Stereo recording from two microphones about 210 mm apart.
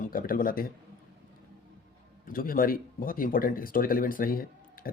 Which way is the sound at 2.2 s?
40° left (ahead or behind).